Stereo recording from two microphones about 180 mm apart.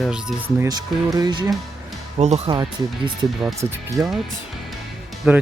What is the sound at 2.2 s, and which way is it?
Speech, 35° right (ahead or behind).